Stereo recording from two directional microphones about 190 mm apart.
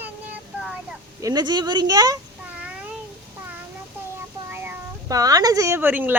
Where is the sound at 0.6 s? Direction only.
5° right (ahead or behind).